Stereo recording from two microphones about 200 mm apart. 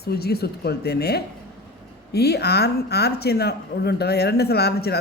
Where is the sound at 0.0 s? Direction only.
50° left (ahead or behind).